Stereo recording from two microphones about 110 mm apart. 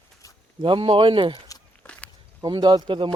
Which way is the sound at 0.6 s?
50° right (ahead or behind).